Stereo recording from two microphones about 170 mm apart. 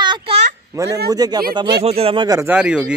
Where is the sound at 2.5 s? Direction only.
5° right (ahead or behind).